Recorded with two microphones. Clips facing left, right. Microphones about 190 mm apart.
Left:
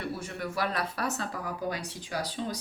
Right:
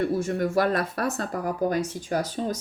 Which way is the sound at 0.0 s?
45° right (ahead or behind).